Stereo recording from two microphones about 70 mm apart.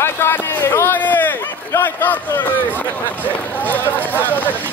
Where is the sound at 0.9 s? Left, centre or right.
Left.